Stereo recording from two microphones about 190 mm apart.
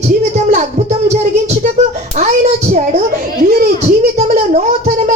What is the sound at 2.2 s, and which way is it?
Speech, 40° right (ahead or behind).